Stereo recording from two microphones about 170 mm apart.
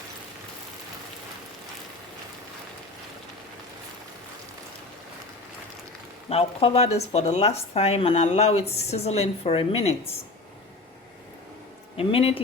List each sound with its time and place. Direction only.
6.2 s speech: 35° left (ahead or behind)
11.9 s speech: 35° left (ahead or behind)